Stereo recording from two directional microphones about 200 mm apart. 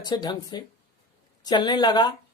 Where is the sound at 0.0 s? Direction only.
20° left (ahead or behind).